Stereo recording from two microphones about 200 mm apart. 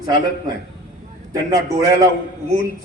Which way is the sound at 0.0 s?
20° right (ahead or behind).